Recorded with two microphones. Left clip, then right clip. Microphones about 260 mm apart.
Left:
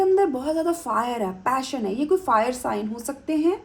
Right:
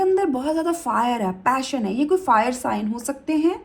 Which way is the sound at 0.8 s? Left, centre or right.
Right.